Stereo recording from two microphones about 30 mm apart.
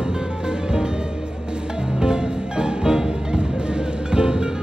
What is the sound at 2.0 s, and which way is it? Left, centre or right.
Music, right.